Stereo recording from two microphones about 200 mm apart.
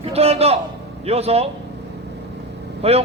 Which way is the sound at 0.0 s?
30° right (ahead or behind).